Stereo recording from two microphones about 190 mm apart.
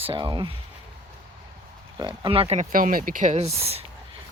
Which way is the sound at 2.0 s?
20° right (ahead or behind).